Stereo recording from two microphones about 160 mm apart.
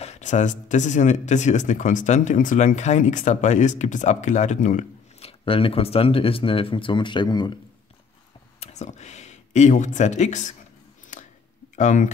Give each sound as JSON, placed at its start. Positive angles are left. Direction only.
{"t": 0.0, "sound": "speech", "side_deg": 45}
{"t": 5.2, "sound": "speech", "side_deg": 35}
{"t": 8.5, "sound": "speech", "side_deg": 45}
{"t": 11.1, "sound": "a sound", "side_deg": 50}
{"t": 11.7, "sound": "speech", "side_deg": 50}